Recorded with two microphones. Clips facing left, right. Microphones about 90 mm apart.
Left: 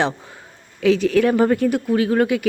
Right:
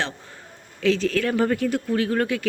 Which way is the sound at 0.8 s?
15° left (ahead or behind).